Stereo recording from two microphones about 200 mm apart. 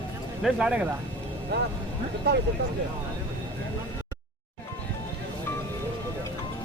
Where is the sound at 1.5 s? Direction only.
55° right (ahead or behind).